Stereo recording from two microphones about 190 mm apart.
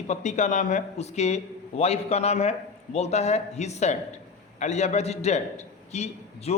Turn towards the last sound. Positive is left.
turn(degrees=35)  # may be behind; listen again after turning